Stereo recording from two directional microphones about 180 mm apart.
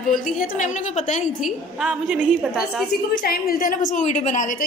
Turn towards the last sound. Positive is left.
turn(degrees=45)  # may be behind; listen again after turning